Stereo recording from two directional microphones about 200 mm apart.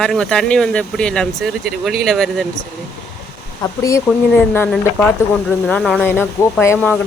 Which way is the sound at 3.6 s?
15° left (ahead or behind).